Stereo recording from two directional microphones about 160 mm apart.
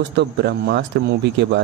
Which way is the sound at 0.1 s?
90° right.